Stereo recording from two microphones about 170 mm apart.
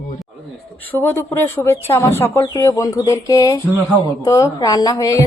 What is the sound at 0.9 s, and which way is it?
A woman's voice, 10° left (ahead or behind).